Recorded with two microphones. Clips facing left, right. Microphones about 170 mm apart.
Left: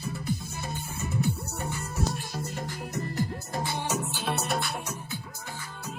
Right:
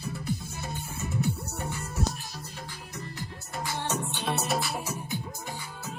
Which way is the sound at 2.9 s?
40° left (ahead or behind).